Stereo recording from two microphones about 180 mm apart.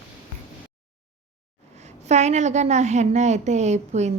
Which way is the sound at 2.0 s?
40° right (ahead or behind).